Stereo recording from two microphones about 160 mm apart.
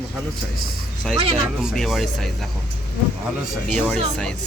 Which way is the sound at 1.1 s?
40° right (ahead or behind).